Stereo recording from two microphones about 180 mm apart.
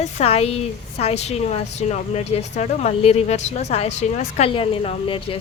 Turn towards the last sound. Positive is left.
turn(degrees=30)  # may be behind; listen again after turning